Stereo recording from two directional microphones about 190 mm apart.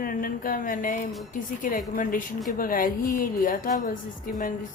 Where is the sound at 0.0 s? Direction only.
50° left (ahead or behind).